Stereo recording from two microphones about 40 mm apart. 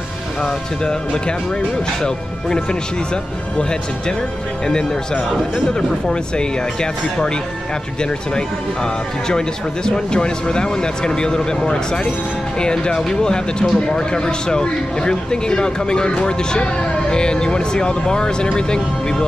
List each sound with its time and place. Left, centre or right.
0.4 s speech: centre
4.6 s speech: centre
8.0 s speech: centre